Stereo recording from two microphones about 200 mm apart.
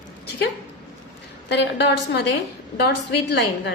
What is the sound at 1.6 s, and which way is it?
A woman's voice, 60° left (ahead or behind).